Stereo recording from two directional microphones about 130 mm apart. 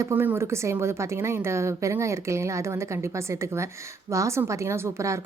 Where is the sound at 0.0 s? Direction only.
15° right (ahead or behind).